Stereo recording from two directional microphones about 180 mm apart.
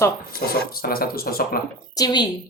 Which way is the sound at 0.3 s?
55° left (ahead or behind).